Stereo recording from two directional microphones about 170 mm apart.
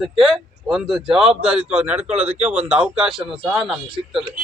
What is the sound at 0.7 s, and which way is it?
A man's voice, 5° right (ahead or behind).